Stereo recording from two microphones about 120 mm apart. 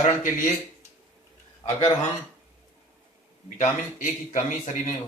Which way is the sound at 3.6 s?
90° left.